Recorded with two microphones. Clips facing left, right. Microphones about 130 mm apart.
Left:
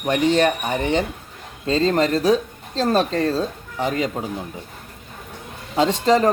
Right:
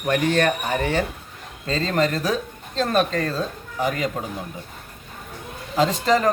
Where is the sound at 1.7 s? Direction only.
30° left (ahead or behind).